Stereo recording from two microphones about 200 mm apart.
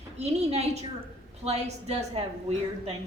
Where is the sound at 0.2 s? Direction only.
35° right (ahead or behind).